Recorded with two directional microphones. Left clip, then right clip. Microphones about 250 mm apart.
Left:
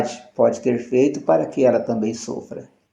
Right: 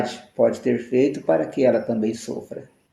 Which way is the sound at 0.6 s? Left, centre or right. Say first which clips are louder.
Left 2 dB; centre.